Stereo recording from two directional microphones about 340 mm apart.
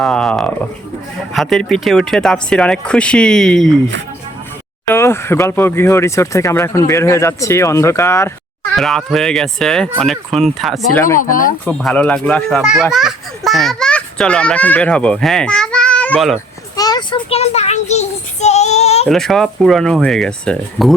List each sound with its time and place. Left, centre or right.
0.0 s speech: centre
4.9 s speech: centre
11.2 s child singing: left
11.6 s speech: centre
16.7 s child singing: centre
19.0 s speech: centre